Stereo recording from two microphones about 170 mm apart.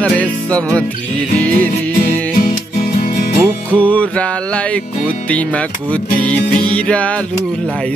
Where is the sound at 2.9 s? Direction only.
60° left (ahead or behind).